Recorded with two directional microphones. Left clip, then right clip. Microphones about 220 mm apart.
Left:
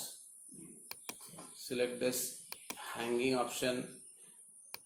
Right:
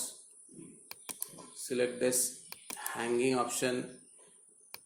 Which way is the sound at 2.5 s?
Centre (ahead or behind).